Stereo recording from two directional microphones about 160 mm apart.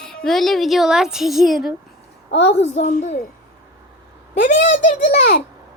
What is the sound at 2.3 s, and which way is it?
Speech, 40° left (ahead or behind).